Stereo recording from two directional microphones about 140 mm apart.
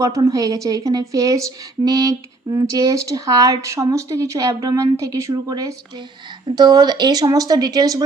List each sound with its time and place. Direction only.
0.0 s a woman's voice: 20° right (ahead or behind)